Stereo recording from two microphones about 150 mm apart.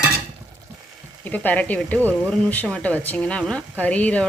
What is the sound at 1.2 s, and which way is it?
Speech, 10° left (ahead or behind).